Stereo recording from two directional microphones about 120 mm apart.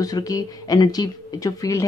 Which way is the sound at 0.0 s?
30° left (ahead or behind).